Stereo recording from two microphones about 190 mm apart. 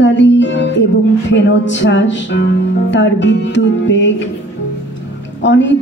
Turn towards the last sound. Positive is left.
turn(degrees=70)  # may be behind; listen again after turning